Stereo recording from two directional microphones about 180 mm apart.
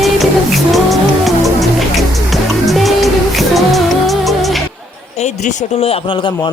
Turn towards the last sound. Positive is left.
turn(degrees=35)  # may be behind; listen again after turning